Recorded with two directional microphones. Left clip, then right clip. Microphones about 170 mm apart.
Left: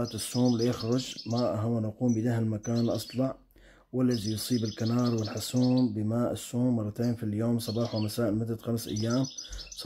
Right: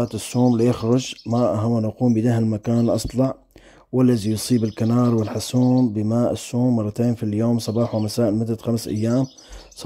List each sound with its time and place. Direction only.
0.0 s speech: 40° right (ahead or behind)
6.6 s speech: 30° right (ahead or behind)
6.9 s speech: 45° right (ahead or behind)